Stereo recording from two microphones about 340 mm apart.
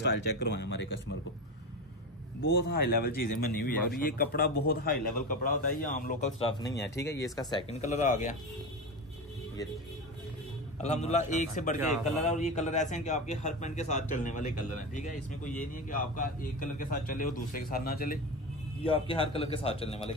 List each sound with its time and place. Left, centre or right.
0.4 s speech: left
2.4 s a man's voice: left
10.8 s a man's voice: centre